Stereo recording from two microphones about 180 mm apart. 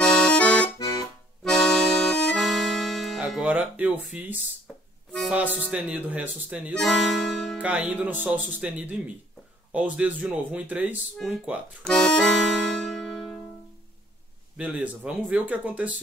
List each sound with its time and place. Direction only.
0.0 s accordion: 5° left (ahead or behind)
0.7 s accordion: 20° left (ahead or behind)
1.4 s accordion: centre (ahead or behind)
5.6 s speech: 5° right (ahead or behind)
6.7 s speech: centre (ahead or behind)
11.8 s accordion: 5° left (ahead or behind)
14.6 s speech: 5° right (ahead or behind)